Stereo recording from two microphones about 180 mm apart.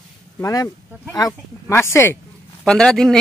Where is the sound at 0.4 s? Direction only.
20° left (ahead or behind).